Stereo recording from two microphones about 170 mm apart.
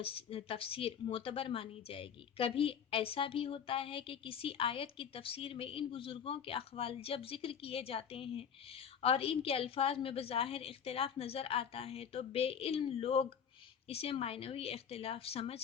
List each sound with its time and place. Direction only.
0.0 s a woman's voice: 35° left (ahead or behind)